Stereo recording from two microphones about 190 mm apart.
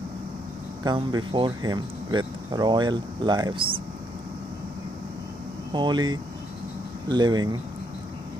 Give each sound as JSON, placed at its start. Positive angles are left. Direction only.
{"t": 0.8, "sound": "speech", "side_deg": -25}
{"t": 5.7, "sound": "speech", "side_deg": -25}